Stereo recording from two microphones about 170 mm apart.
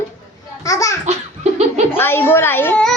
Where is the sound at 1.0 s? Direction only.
40° right (ahead or behind).